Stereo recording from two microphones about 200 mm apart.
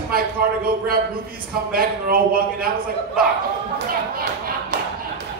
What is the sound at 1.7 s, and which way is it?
Speech, 50° right (ahead or behind).